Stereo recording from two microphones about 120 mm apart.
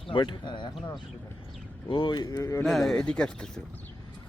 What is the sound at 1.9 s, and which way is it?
Speech, 40° left (ahead or behind).